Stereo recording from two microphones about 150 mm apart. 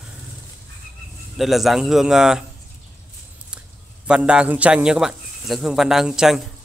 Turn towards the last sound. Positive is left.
turn(degrees=-5)  # may be behind; listen again after turning